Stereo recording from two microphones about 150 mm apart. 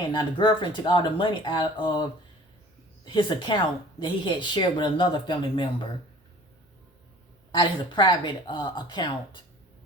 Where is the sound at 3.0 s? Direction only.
30° left (ahead or behind).